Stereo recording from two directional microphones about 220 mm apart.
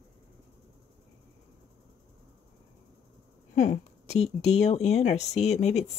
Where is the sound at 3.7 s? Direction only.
30° left (ahead or behind).